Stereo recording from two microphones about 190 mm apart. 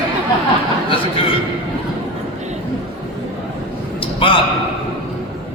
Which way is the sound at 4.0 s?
30° left (ahead or behind).